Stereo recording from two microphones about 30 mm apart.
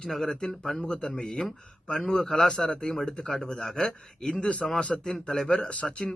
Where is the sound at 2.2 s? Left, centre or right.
Centre.